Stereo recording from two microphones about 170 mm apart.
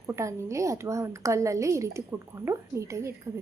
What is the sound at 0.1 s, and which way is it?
A woman's voice, 15° right (ahead or behind).